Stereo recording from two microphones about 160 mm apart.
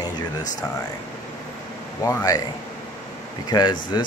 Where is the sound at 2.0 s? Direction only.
20° left (ahead or behind).